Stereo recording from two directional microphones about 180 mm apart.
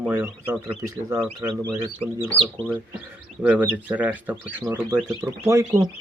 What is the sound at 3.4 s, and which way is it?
Speech, 10° right (ahead or behind).